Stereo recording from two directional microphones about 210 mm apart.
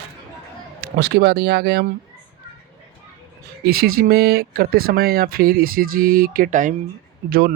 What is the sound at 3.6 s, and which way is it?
Speech, 45° right (ahead or behind).